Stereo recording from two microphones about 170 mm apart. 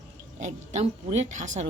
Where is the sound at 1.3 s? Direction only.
45° right (ahead or behind).